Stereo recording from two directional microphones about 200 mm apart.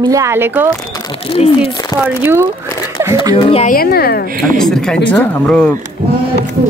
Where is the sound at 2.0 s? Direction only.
10° right (ahead or behind).